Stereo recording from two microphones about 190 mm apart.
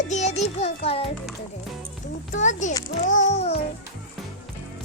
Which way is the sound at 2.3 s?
40° left (ahead or behind).